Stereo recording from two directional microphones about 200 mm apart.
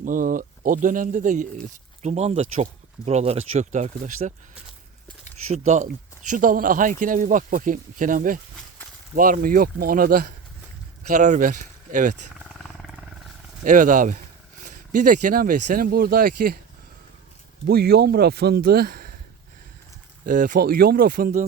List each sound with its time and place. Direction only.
0.0 s speech: 45° right (ahead or behind)
5.5 s speech: 35° right (ahead or behind)
12.5 s wild animals: centre (ahead or behind)
13.7 s speech: 40° right (ahead or behind)
17.7 s speech: 50° right (ahead or behind)
20.2 s speech: 40° right (ahead or behind)